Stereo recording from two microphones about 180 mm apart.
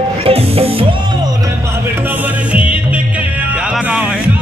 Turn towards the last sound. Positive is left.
turn(degrees=-5)  # may be behind; listen again after turning